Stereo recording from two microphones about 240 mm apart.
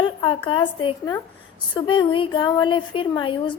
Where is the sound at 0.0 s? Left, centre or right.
Left.